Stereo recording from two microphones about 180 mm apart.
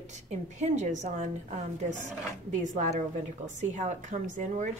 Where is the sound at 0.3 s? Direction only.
40° right (ahead or behind).